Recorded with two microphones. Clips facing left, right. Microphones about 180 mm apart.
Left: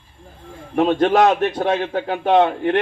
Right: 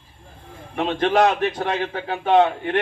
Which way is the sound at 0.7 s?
40° left (ahead or behind).